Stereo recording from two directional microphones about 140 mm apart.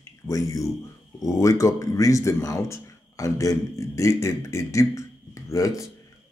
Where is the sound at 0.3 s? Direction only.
25° left (ahead or behind).